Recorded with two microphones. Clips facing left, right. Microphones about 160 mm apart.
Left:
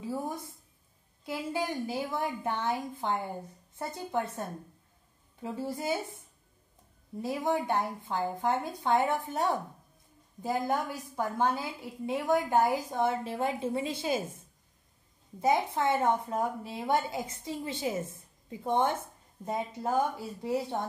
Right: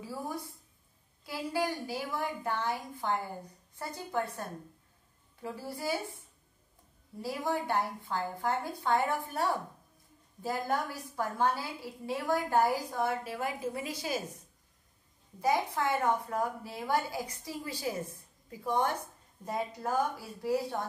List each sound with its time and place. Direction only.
0.0 s a woman's voice: 20° left (ahead or behind)
15.4 s a woman's voice: 20° left (ahead or behind)